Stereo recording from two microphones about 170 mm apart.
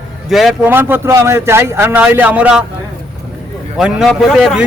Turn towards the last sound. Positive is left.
turn(degrees=0)  # may be behind; listen again after turning